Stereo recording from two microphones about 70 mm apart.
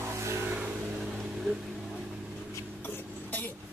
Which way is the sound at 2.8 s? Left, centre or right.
Left.